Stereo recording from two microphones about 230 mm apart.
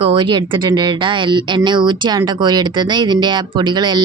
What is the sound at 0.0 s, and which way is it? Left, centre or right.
A woman's voice, right.